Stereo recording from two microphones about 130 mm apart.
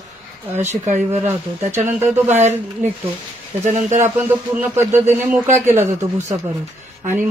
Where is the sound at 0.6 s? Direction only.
65° right (ahead or behind).